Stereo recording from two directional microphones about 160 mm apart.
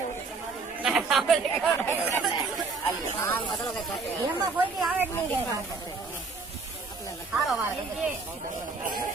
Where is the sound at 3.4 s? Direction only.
30° left (ahead or behind).